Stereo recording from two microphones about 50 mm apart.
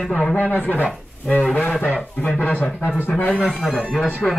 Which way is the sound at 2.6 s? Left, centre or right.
Centre.